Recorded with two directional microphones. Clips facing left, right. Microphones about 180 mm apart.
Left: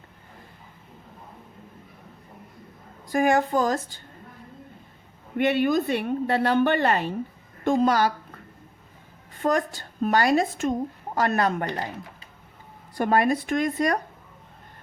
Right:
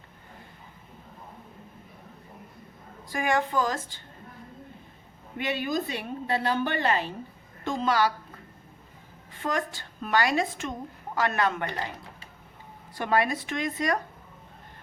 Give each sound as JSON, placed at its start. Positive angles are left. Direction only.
{"t": 3.1, "sound": "speech", "side_deg": 45}
{"t": 5.4, "sound": "a woman's voice", "side_deg": 60}
{"t": 9.4, "sound": "a woman's voice", "side_deg": 45}
{"t": 13.0, "sound": "speech", "side_deg": 45}